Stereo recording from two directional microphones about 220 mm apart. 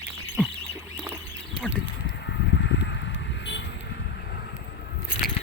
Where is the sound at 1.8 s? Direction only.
55° left (ahead or behind).